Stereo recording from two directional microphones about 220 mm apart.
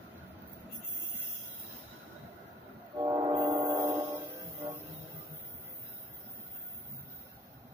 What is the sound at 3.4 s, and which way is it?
Music, 15° right (ahead or behind).